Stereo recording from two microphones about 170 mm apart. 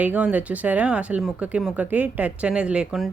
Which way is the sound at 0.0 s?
10° right (ahead or behind).